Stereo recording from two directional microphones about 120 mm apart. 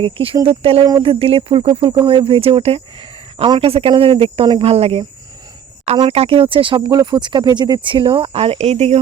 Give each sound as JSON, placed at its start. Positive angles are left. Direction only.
{"t": 0.0, "sound": "speech", "side_deg": -50}
{"t": 6.1, "sound": "speech", "side_deg": -55}